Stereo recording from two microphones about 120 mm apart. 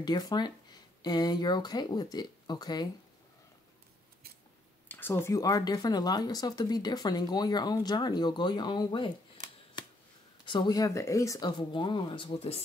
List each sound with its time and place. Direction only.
0.0 s speech: 35° left (ahead or behind)
4.8 s speech: 15° left (ahead or behind); by 9.1 s 40° left (ahead or behind)
10.4 s speech: 40° left (ahead or behind)
11.5 s speech: 40° left (ahead or behind)